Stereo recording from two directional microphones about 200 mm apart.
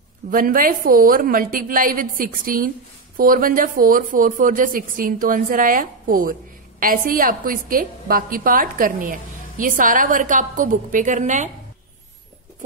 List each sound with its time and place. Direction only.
0.3 s a woman's voice: 45° right (ahead or behind)